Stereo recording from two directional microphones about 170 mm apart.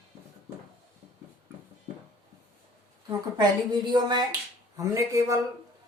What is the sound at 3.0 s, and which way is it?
Speech, 25° right (ahead or behind).